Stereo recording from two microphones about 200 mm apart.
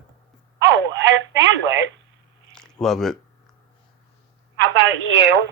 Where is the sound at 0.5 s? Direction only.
65° right (ahead or behind).